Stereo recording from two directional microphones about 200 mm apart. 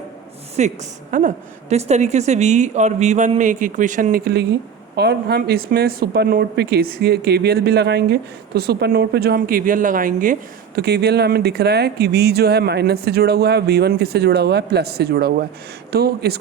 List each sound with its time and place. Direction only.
0.6 s a woman's voice: 35° right (ahead or behind); by 16.4 s 50° right (ahead or behind)